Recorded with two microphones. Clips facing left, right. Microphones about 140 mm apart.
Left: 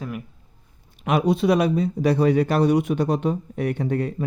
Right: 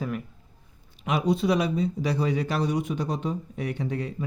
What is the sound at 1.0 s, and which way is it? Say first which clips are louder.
Speech: left 4 dB; 60° left (ahead or behind).